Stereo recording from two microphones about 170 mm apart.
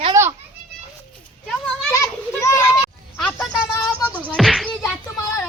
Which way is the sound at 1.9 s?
20° left (ahead or behind).